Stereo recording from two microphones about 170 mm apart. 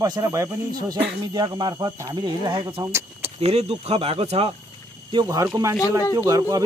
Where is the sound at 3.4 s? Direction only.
40° right (ahead or behind).